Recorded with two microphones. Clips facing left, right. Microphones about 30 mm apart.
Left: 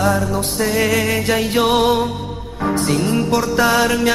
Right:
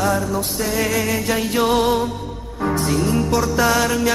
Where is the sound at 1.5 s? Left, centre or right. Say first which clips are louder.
Left 2 dB; left.